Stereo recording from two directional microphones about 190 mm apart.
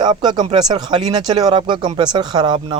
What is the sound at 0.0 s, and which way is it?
Speech, 25° right (ahead or behind).